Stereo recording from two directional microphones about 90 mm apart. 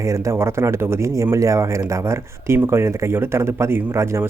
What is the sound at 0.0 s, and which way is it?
Speech, 35° right (ahead or behind).